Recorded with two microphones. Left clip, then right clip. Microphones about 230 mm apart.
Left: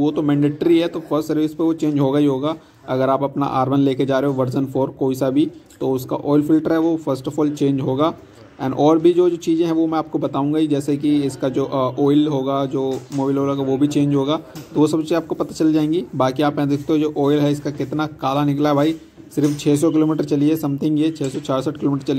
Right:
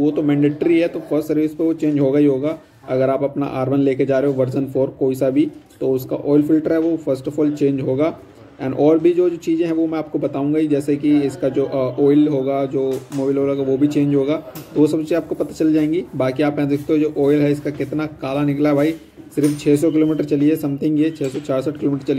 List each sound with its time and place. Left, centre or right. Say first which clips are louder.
0.0 s speech: right 1 dB; left